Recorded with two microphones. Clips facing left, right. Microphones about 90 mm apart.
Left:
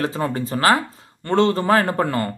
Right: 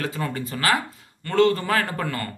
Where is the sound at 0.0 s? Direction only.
30° left (ahead or behind).